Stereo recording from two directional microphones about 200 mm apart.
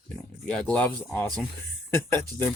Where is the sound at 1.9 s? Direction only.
10° left (ahead or behind).